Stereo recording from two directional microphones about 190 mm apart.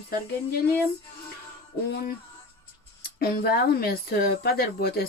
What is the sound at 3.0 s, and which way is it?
Speech, 55° left (ahead or behind).